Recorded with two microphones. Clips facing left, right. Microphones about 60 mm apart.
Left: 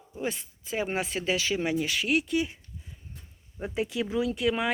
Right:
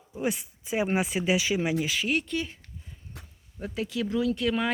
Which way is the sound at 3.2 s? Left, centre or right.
Right.